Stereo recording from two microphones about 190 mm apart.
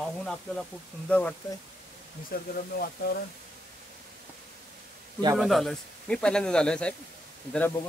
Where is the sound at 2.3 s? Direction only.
50° left (ahead or behind).